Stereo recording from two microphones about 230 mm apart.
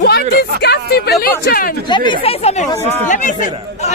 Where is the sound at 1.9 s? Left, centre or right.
Centre.